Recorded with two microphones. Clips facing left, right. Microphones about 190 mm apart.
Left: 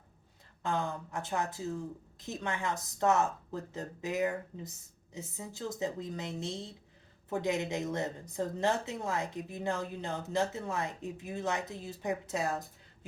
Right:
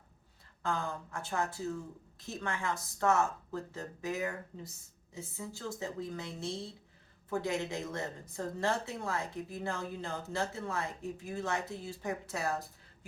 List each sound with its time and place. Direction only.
0.6 s speech: 20° left (ahead or behind)